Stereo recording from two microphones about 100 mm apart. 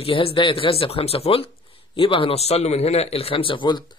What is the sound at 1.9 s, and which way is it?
Speech, 60° left (ahead or behind).